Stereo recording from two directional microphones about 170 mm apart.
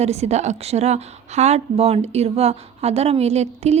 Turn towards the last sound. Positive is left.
turn(degrees=-40)  # may be behind; listen again after turning